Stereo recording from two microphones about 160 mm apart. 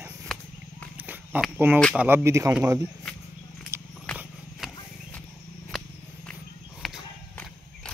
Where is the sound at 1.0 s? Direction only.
10° right (ahead or behind).